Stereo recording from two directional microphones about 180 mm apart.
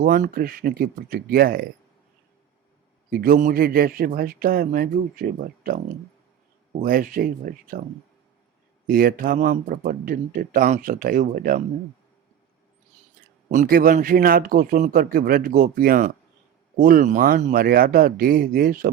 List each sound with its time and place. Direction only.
0.0 s speech: 50° right (ahead or behind)
3.1 s a man's voice: 55° right (ahead or behind)
6.8 s a man's voice: 50° right (ahead or behind)
8.9 s a man's voice: 50° right (ahead or behind)
13.5 s a man's voice: 50° right (ahead or behind)